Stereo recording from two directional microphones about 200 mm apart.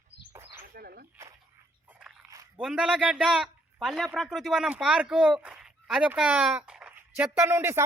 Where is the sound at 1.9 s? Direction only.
5° right (ahead or behind).